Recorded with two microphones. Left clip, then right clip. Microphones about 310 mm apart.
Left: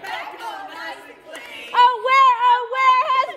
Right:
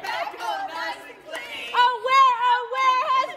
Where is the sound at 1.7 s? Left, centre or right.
Left.